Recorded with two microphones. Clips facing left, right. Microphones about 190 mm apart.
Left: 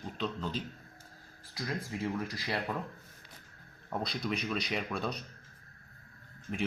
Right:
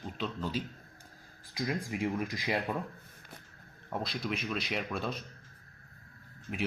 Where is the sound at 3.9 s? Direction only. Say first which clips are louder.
Left 1 dB; centre (ahead or behind).